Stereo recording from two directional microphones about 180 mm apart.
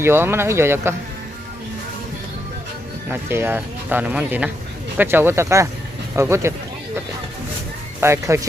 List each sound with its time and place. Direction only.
0.0 s speech: 15° right (ahead or behind)
3.1 s speech: 15° right (ahead or behind)
8.0 s speech: 15° right (ahead or behind)